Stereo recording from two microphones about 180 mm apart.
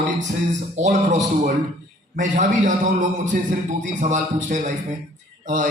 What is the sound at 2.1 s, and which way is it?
Speech, 45° right (ahead or behind).